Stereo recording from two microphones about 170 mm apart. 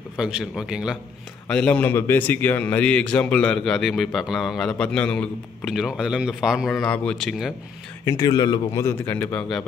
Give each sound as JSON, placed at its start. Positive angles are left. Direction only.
{"t": 0.2, "sound": "a man's voice", "side_deg": -5}
{"t": 1.5, "sound": "a man's voice", "side_deg": 5}
{"t": 8.0, "sound": "speech", "side_deg": 20}